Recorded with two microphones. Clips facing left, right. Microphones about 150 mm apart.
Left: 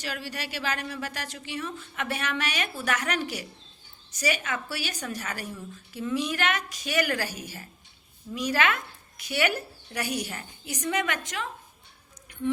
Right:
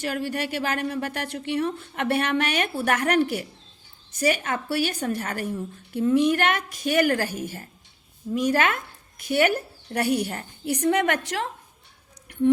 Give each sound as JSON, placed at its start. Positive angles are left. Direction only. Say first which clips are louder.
{"t": 0.0, "sound": "a woman's voice", "louder": "right 8 dB", "side_deg": -50}